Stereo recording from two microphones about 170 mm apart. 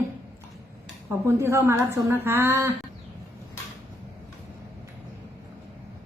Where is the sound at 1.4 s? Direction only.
15° right (ahead or behind).